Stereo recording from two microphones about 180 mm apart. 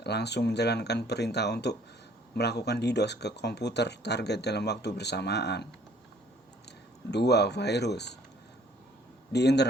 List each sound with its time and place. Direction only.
0.0 s speech: 70° left (ahead or behind)
7.1 s speech: 65° left (ahead or behind)
9.3 s speech: 70° left (ahead or behind)